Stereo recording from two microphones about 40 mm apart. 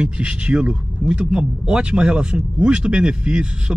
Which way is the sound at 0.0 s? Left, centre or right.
Right.